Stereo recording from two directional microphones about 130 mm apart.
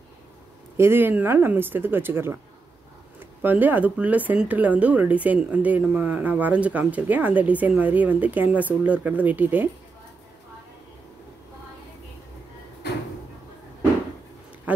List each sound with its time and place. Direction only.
0.7 s speech: 20° right (ahead or behind)
3.4 s speech: 15° right (ahead or behind)